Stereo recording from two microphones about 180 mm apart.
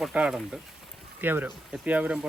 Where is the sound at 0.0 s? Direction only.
5° right (ahead or behind).